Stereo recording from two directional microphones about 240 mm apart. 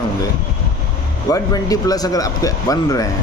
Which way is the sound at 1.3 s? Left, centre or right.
Centre.